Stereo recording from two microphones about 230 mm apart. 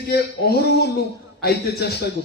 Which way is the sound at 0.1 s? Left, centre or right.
Left.